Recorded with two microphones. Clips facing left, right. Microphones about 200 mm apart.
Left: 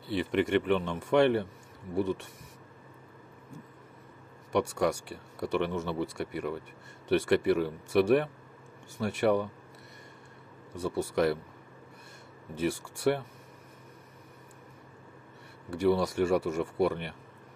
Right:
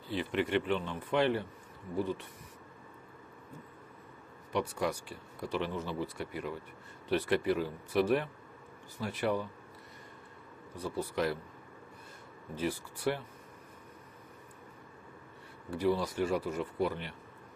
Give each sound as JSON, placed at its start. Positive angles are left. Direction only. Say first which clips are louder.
{"t": 0.2, "sound": "speech", "louder": "left 4 dB", "side_deg": 65}
{"t": 4.5, "sound": "speech", "louder": "left 5 dB", "side_deg": 70}
{"t": 10.7, "sound": "speech", "louder": "left 5 dB", "side_deg": 75}
{"t": 12.6, "sound": "speech", "louder": "left 5 dB", "side_deg": 75}
{"t": 15.7, "sound": "speech", "louder": "left 4 dB", "side_deg": 75}